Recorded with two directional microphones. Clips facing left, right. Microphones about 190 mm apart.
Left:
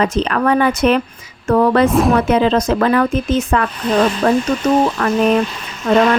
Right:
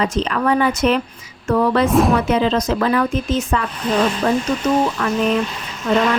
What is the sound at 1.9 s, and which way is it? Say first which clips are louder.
Speech: left 1 dB; centre (ahead or behind).